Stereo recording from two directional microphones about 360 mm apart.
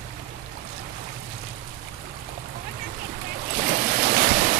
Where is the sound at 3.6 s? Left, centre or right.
Right.